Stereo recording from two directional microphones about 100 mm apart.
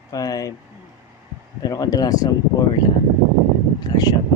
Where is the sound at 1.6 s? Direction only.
35° left (ahead or behind).